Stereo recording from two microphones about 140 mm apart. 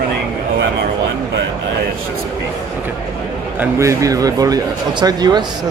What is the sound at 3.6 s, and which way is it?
A man's voice, 20° right (ahead or behind).